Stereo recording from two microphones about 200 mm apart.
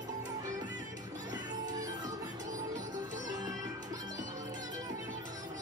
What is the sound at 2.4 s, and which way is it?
Music, 40° right (ahead or behind).